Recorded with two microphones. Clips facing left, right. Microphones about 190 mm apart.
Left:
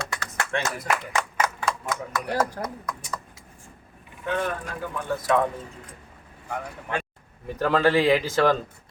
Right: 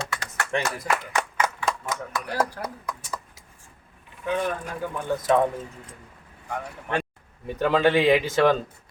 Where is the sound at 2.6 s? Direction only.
10° right (ahead or behind).